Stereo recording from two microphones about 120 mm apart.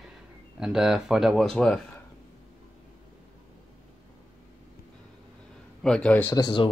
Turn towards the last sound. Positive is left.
turn(degrees=40)  # may be behind; listen again after turning